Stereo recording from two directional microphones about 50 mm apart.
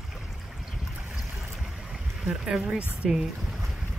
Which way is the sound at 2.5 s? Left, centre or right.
Centre.